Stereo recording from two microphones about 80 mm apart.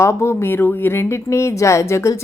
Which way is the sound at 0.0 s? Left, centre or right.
Left.